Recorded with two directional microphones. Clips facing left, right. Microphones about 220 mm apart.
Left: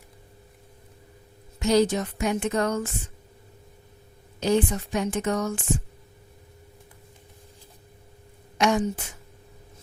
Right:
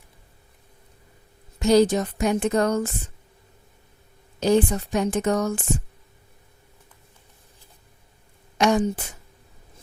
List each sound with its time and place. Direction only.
1.5 s a woman's voice: 35° right (ahead or behind)
4.4 s a woman's voice: 40° right (ahead or behind)
8.5 s a woman's voice: 35° right (ahead or behind)